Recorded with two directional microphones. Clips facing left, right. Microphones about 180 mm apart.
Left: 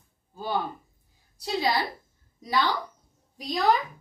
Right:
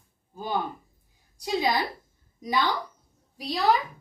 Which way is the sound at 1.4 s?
15° right (ahead or behind).